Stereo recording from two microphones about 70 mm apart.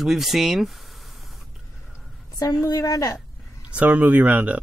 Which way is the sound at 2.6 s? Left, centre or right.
Left.